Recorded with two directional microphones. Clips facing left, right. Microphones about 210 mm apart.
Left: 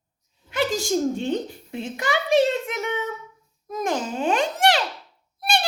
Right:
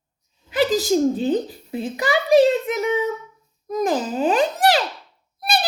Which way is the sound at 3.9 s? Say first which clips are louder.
Right 4 dB; 35° right (ahead or behind).